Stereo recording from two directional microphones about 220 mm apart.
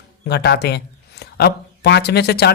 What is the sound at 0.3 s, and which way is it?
Speech, 50° left (ahead or behind).